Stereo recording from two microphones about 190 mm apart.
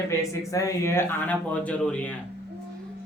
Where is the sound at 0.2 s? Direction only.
15° left (ahead or behind).